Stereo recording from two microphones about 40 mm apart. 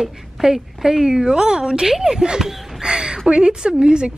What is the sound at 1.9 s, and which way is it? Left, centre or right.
A woman's voice, centre.